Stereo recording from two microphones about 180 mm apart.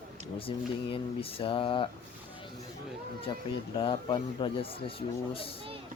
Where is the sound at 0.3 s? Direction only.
30° left (ahead or behind).